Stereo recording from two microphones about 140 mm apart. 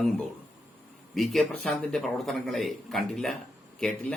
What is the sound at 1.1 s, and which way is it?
A man's voice, centre (ahead or behind).